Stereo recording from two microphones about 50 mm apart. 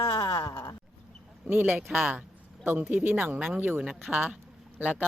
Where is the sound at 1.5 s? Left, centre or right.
Right.